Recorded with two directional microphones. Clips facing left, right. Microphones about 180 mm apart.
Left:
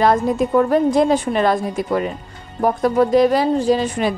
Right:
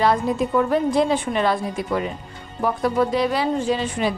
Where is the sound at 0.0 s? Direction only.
45° left (ahead or behind).